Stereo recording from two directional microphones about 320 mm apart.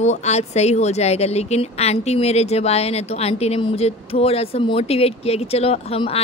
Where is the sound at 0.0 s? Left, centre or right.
Left.